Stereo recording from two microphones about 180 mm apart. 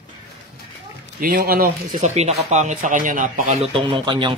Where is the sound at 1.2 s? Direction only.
50° right (ahead or behind).